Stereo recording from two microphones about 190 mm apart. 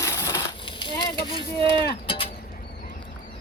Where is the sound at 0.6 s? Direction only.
25° left (ahead or behind).